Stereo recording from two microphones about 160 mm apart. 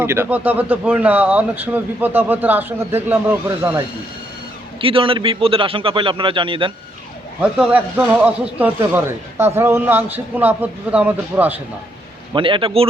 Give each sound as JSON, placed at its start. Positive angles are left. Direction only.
{"t": 0.0, "sound": "speech", "side_deg": -15}
{"t": 4.8, "sound": "a man's voice", "side_deg": -35}
{"t": 7.4, "sound": "speech", "side_deg": -10}
{"t": 12.3, "sound": "a man's voice", "side_deg": -30}